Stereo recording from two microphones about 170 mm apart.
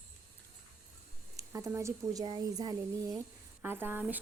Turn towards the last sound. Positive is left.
turn(degrees=-10)  # may be behind; listen again after turning